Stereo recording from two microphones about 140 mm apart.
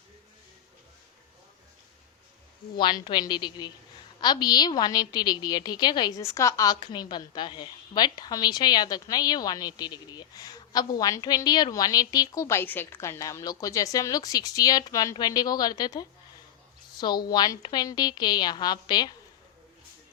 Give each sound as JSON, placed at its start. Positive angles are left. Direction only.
{"t": 2.7, "sound": "a woman's voice", "side_deg": 35}
{"t": 6.7, "sound": "a woman's voice", "side_deg": 35}
{"t": 17.3, "sound": "a woman's voice", "side_deg": 30}